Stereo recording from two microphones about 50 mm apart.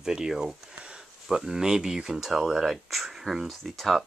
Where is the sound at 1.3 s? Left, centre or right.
Centre.